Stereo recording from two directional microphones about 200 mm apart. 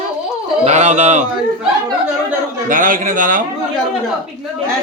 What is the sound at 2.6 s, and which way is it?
Speech, 45° right (ahead or behind).